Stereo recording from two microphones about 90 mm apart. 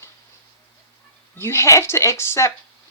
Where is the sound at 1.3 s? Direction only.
30° left (ahead or behind).